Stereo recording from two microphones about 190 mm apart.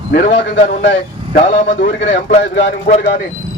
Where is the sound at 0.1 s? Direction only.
60° left (ahead or behind).